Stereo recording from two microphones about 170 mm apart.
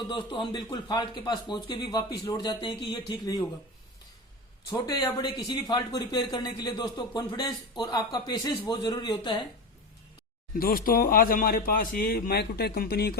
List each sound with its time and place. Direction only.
0.1 s a man's voice: 25° left (ahead or behind)
4.7 s a man's voice: 20° left (ahead or behind)
10.5 s speech: 60° left (ahead or behind)